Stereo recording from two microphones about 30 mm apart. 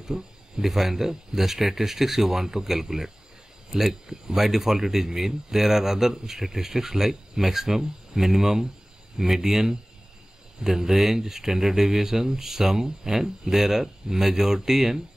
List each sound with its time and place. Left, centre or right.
0.1 s speech: centre
0.7 s speech: centre